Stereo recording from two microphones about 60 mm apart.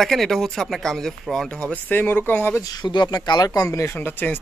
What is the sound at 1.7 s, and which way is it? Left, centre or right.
Speech, left.